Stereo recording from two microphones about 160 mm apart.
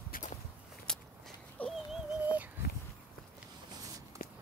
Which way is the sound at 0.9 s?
5° left (ahead or behind).